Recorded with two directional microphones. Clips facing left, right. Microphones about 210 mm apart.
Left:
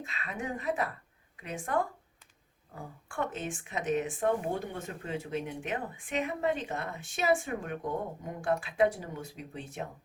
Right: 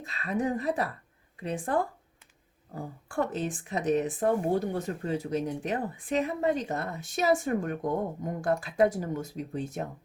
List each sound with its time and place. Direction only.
0.0 s speech: 35° right (ahead or behind)
3.1 s speech: 35° right (ahead or behind)